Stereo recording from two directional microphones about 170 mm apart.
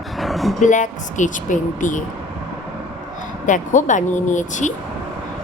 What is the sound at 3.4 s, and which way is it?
Speech, 45° left (ahead or behind).